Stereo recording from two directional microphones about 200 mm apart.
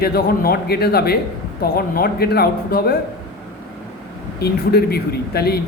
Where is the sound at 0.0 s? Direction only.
50° left (ahead or behind).